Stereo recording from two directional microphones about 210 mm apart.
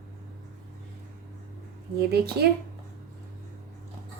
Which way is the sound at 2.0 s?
50° right (ahead or behind).